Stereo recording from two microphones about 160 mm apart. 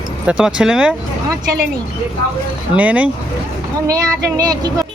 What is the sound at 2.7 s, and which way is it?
Speech, 10° right (ahead or behind).